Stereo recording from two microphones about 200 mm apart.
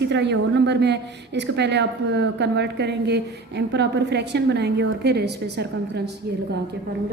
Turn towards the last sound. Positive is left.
turn(degrees=-55)  # may be behind; listen again after turning